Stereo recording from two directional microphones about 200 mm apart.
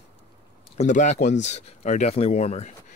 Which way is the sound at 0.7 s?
35° left (ahead or behind).